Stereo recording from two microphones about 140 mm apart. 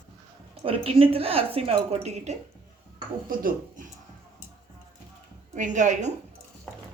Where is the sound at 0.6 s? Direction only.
40° right (ahead or behind).